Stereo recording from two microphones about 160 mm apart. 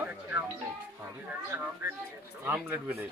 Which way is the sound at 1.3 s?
15° right (ahead or behind).